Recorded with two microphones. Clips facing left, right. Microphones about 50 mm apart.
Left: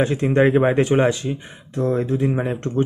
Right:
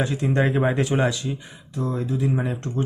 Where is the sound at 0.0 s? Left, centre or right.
Left.